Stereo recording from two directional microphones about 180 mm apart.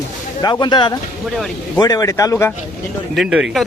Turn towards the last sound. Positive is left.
turn(degrees=0)  # may be behind; listen again after turning